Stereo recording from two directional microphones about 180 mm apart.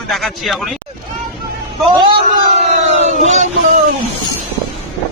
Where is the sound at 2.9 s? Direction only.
40° right (ahead or behind).